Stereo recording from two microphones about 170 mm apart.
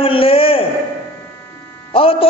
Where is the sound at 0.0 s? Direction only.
35° left (ahead or behind).